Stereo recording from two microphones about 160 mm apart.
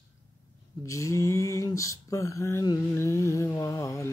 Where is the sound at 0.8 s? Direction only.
20° left (ahead or behind).